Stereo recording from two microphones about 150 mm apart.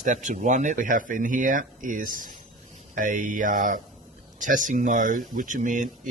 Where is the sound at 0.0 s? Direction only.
60° right (ahead or behind).